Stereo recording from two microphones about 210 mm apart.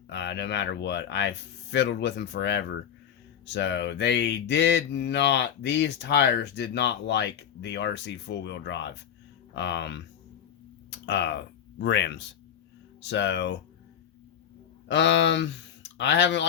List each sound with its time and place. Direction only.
0.1 s speech: 55° left (ahead or behind)
11.0 s speech: 55° left (ahead or behind)
14.8 s speech: 55° left (ahead or behind)